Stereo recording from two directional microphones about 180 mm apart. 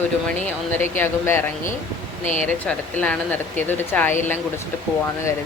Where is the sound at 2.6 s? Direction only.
5° left (ahead or behind).